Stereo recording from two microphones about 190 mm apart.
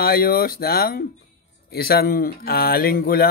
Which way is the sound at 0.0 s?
50° left (ahead or behind).